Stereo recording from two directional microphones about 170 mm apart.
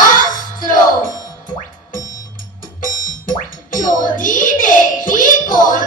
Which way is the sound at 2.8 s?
50° left (ahead or behind).